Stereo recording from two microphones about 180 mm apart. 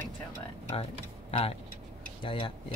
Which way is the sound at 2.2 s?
30° left (ahead or behind).